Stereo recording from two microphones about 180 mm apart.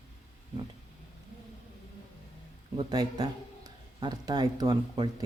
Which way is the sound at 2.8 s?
20° right (ahead or behind).